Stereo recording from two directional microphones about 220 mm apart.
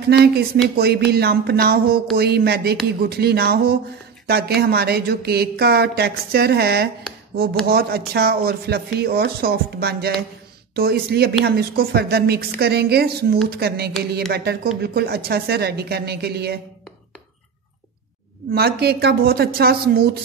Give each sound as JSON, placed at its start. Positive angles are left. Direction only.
{"t": 0.1, "sound": "speech", "side_deg": -45}
{"t": 18.5, "sound": "speech", "side_deg": -45}